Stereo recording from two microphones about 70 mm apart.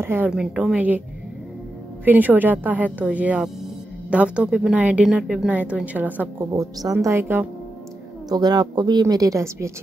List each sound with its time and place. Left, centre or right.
0.0 s a woman's voice: right
2.0 s a woman's voice: right
5.0 s speech: centre
5.5 s a woman's voice: right
6.5 s a woman's voice: right
7.2 s speech: right
8.3 s speech: right
9.0 s a woman's voice: right